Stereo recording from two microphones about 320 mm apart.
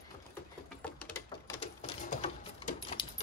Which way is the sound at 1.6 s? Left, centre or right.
Left.